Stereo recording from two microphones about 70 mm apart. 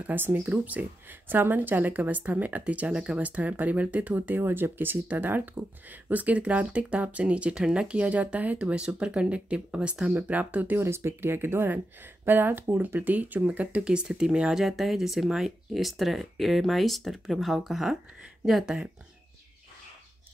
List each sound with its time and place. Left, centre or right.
0.0 s speech: right
10.8 s speech: right; by 18.7 s centre